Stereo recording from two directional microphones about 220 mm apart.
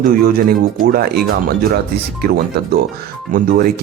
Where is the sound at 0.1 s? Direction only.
40° right (ahead or behind).